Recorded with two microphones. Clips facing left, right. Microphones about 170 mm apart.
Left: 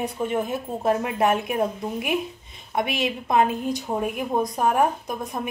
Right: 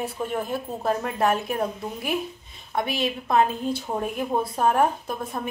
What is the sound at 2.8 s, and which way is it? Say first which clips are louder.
A woman's voice: left 1 dB; 20° left (ahead or behind).